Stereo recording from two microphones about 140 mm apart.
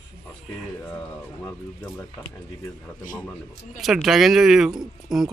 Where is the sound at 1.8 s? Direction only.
20° left (ahead or behind).